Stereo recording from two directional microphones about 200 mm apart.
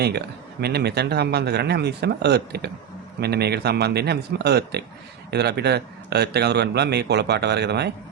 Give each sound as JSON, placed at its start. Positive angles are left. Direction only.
{"t": 0.6, "sound": "a man's voice", "side_deg": -55}